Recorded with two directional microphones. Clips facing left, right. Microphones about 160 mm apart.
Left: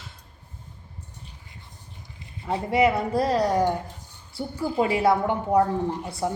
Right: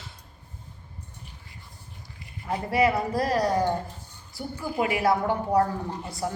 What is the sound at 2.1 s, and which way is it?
A woman's voice, 25° left (ahead or behind).